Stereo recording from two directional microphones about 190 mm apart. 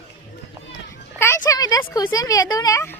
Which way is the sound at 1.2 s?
15° left (ahead or behind).